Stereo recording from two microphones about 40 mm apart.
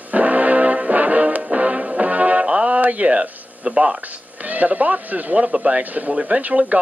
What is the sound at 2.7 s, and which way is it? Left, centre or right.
Speech, right.